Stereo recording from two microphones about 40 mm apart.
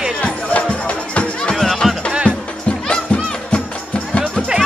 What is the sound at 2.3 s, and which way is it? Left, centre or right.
Music, left.